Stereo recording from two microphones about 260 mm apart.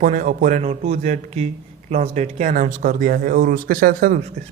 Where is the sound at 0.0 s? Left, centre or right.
Right.